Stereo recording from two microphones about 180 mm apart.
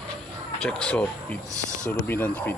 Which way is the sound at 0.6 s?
5° left (ahead or behind).